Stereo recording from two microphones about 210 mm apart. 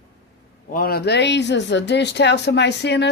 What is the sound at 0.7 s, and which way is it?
Speech, 45° left (ahead or behind).